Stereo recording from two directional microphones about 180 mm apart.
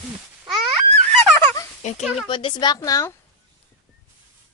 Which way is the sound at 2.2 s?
25° left (ahead or behind).